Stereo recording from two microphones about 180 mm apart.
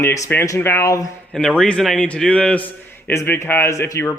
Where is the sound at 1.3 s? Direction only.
5° left (ahead or behind).